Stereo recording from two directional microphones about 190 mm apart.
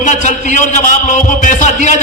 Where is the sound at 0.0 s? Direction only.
40° left (ahead or behind).